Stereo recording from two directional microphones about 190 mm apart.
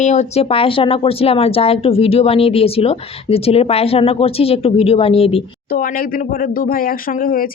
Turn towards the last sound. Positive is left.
turn(degrees=50)  # may be behind; listen again after turning